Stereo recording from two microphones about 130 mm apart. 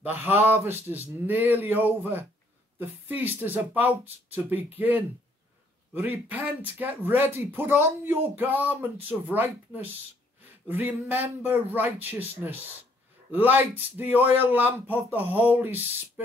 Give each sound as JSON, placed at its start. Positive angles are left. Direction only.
{"t": 0.0, "sound": "speech", "side_deg": -15}